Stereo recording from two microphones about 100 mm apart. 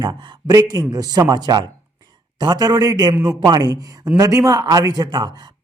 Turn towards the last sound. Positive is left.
turn(degrees=-40)  # may be behind; listen again after turning